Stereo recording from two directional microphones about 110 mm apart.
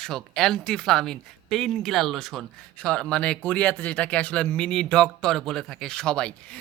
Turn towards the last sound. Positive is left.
turn(degrees=5)  # may be behind; listen again after turning